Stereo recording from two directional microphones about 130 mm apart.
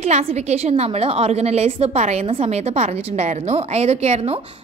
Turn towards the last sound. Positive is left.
turn(degrees=-55)  # may be behind; listen again after turning